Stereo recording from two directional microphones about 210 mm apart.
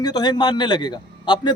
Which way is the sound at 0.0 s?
20° left (ahead or behind).